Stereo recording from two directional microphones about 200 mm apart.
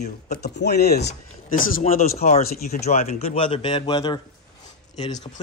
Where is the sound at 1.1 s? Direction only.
40° left (ahead or behind).